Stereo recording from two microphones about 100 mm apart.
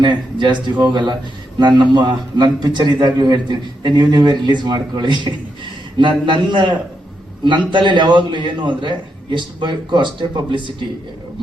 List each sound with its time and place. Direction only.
0.0 s a man's voice: 50° right (ahead or behind)